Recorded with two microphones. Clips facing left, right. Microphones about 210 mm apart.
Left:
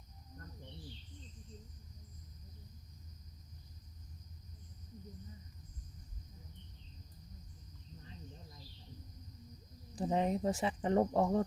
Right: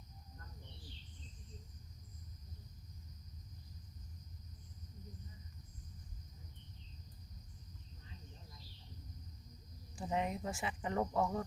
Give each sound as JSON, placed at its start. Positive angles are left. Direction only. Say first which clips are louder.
{"t": 9.9, "sound": "speech", "louder": "left 5 dB", "side_deg": 35}